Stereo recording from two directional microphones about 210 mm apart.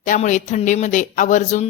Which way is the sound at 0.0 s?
35° left (ahead or behind).